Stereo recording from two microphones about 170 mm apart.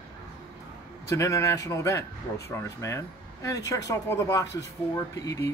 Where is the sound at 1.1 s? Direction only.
20° left (ahead or behind).